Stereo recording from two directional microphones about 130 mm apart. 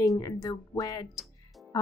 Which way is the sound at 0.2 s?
25° left (ahead or behind).